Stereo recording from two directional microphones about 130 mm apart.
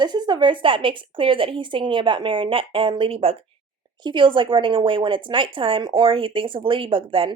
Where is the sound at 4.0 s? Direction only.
35° right (ahead or behind).